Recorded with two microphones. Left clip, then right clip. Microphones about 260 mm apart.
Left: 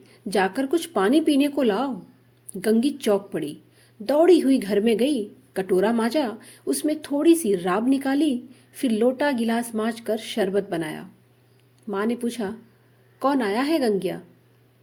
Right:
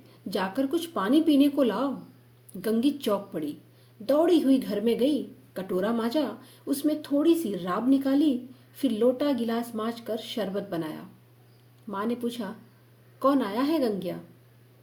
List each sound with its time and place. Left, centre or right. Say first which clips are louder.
0.3 s a woman's voice: left 6 dB; left